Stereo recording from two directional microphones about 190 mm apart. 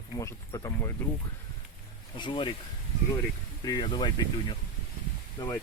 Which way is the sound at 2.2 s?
25° left (ahead or behind).